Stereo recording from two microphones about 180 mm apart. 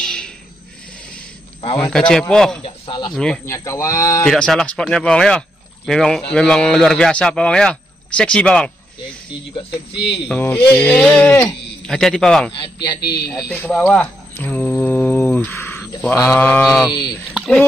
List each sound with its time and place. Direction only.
0.0 s a sound: 5° left (ahead or behind)
1.8 s speech: 5° left (ahead or behind)
2.6 s speech: 25° left (ahead or behind)
4.3 s speech: 5° left (ahead or behind)
9.7 s speech: 70° left (ahead or behind)
10.2 s speech: 5° left (ahead or behind)
13.0 s speech: 65° left (ahead or behind)
13.5 s mantra: centre (ahead or behind)
15.8 s speech: 10° left (ahead or behind)